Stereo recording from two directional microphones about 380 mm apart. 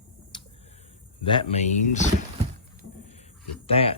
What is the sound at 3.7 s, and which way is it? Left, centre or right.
Speech, centre.